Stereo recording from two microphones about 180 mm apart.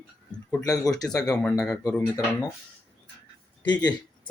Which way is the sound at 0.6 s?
20° left (ahead or behind).